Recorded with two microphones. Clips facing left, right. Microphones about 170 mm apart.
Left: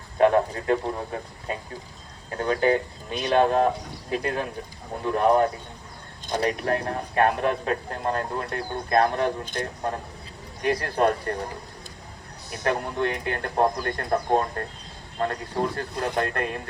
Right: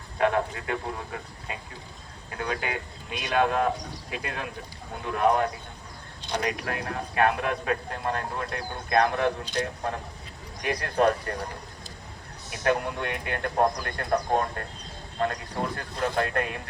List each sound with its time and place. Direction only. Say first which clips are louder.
0.2 s speech: left 5 dB; 40° left (ahead or behind)
10.6 s speech: left 2 dB; 35° left (ahead or behind)
12.6 s speech: left 1 dB; 35° left (ahead or behind)